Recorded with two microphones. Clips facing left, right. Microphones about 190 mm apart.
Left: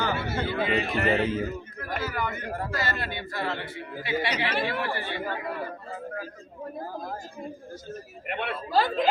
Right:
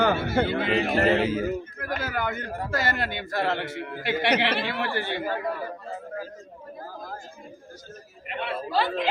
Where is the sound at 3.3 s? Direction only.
75° right (ahead or behind).